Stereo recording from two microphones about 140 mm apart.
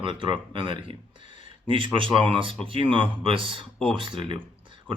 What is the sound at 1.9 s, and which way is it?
Speech, 40° right (ahead or behind).